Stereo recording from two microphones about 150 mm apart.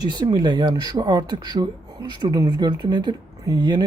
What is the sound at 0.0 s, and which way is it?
Speech, 30° right (ahead or behind).